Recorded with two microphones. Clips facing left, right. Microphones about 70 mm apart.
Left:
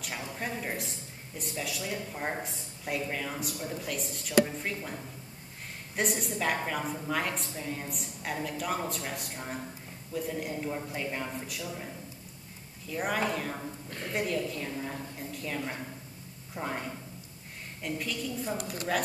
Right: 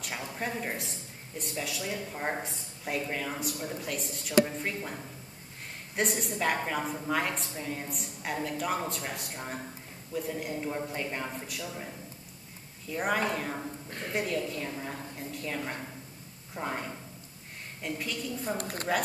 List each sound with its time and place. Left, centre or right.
0.0 s a sound: centre
1.4 s a woman's voice: centre
12.9 s a woman's voice: centre
18.6 s a woman's voice: right